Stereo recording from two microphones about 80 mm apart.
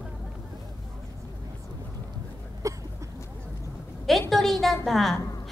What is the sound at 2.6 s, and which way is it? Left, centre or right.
Hiccup, right.